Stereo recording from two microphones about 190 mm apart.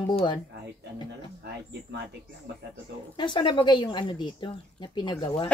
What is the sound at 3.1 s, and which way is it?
Speech, 25° left (ahead or behind).